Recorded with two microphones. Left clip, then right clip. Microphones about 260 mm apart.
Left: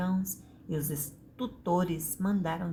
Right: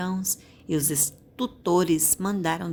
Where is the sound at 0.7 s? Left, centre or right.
Right.